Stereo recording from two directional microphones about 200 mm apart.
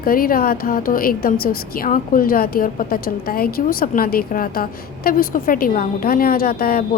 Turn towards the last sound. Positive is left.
turn(degrees=50)  # may be behind; listen again after turning